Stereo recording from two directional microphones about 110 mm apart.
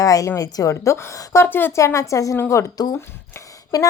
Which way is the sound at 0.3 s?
30° left (ahead or behind).